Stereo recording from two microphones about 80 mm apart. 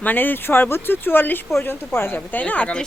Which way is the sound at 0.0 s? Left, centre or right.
Left.